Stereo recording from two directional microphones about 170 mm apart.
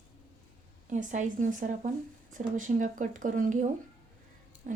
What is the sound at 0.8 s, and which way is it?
A woman's voice, 45° right (ahead or behind).